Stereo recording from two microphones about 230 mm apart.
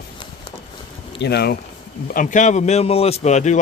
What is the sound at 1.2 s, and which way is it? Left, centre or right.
Speech, left.